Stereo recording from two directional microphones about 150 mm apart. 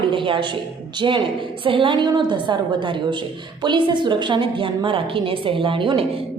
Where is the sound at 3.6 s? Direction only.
30° right (ahead or behind).